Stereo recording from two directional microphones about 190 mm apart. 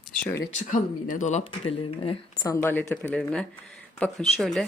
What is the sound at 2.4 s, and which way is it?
Speech, 15° left (ahead or behind).